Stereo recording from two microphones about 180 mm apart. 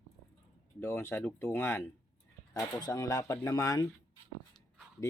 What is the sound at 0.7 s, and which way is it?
Speech, 15° left (ahead or behind).